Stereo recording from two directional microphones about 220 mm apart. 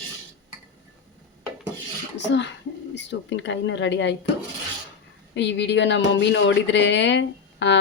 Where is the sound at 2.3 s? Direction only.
55° left (ahead or behind).